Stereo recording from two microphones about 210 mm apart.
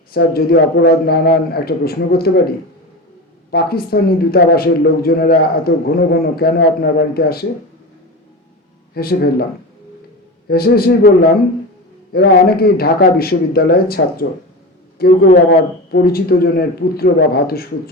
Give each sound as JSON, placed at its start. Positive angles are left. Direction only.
{"t": 0.1, "sound": "speech", "side_deg": 45}
{"t": 3.5, "sound": "speech", "side_deg": 45}
{"t": 9.0, "sound": "speech", "side_deg": 45}
{"t": 10.5, "sound": "speech", "side_deg": 45}
{"t": 12.1, "sound": "speech", "side_deg": 50}
{"t": 15.3, "sound": "speech", "side_deg": 45}